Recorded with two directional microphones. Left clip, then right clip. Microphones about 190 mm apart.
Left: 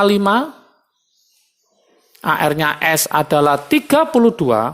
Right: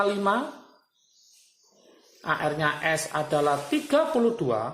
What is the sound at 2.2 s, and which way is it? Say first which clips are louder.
A woman's voice: left 10 dB; 60° left (ahead or behind).